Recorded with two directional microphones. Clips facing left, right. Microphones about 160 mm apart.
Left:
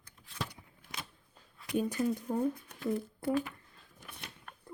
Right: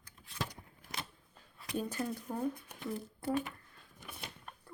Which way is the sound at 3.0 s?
30° right (ahead or behind).